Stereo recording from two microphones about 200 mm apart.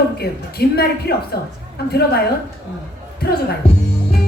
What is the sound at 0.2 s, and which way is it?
A woman's voice, 50° left (ahead or behind).